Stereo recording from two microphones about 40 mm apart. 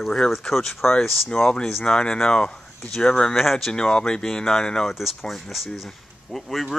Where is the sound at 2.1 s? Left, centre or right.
Centre.